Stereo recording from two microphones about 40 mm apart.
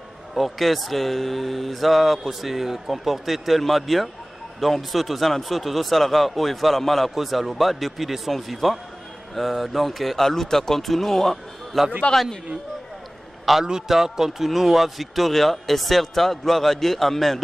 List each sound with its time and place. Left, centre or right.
0.3 s speech: centre
12.1 s a man's voice: left
13.5 s speech: centre